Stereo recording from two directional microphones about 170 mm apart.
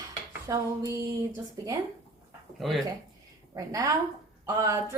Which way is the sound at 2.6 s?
Centre (ahead or behind).